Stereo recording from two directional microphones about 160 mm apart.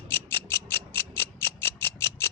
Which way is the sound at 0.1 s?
15° left (ahead or behind).